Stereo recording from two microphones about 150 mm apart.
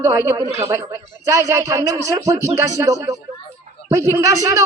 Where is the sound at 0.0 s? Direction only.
20° right (ahead or behind).